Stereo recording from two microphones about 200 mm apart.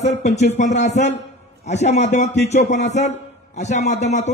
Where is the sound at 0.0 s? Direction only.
35° left (ahead or behind).